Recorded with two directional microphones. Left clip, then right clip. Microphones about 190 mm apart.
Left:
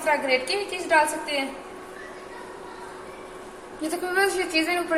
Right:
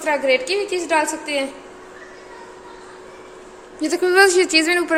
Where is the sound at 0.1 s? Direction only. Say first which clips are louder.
Right 5 dB; 50° right (ahead or behind).